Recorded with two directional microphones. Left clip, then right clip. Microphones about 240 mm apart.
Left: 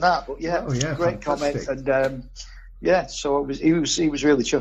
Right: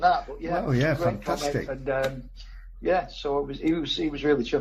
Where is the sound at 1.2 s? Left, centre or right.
Left.